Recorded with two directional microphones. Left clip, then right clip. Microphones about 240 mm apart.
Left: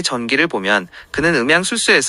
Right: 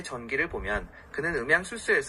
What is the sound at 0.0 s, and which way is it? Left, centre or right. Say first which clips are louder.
Speech: left 13 dB; left.